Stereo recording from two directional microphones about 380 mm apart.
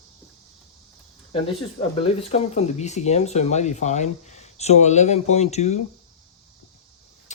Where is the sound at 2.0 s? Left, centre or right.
Centre.